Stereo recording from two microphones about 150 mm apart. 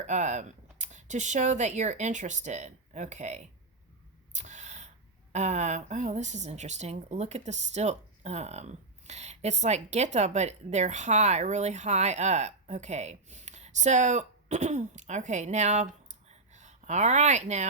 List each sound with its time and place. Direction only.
0.0 s speech: 50° right (ahead or behind)
4.4 s a sound: 50° right (ahead or behind)
5.3 s speech: 50° right (ahead or behind)